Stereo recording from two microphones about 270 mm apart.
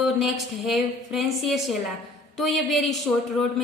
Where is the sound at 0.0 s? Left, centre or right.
Centre.